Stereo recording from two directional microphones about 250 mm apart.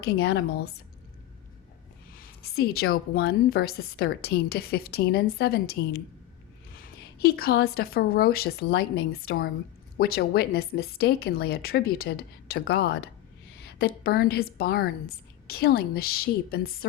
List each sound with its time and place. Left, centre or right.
0.0 s a woman's voice: left
2.1 s a woman's voice: left